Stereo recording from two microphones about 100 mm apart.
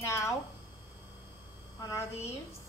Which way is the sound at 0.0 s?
30° left (ahead or behind).